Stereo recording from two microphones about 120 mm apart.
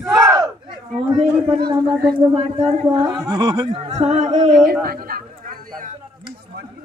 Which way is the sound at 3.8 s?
70° right (ahead or behind).